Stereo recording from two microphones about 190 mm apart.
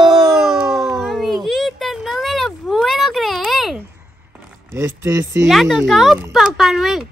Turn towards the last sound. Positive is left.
turn(degrees=0)  # may be behind; listen again after turning